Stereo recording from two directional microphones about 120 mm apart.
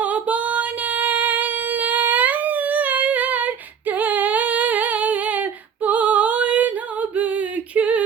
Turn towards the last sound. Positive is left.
turn(degrees=-15)  # may be behind; listen again after turning